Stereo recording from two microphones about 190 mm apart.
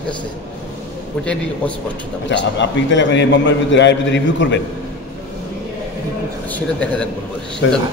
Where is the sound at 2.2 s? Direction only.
70° left (ahead or behind).